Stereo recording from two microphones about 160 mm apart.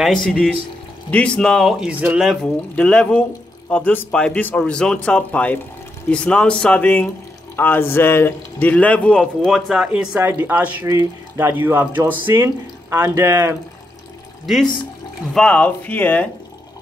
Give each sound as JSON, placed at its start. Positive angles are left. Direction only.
{"t": 0.0, "sound": "speech", "side_deg": 0}
{"t": 2.7, "sound": "speech", "side_deg": 5}
{"t": 14.4, "sound": "speech", "side_deg": 0}